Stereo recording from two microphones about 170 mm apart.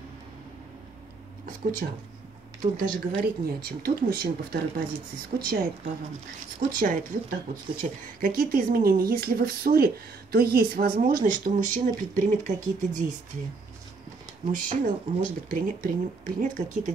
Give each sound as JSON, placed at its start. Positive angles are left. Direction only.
{"t": 1.4, "sound": "speech", "side_deg": -50}
{"t": 14.5, "sound": "speech", "side_deg": -50}